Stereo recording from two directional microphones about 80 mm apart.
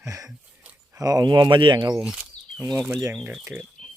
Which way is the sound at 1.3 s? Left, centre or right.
Right.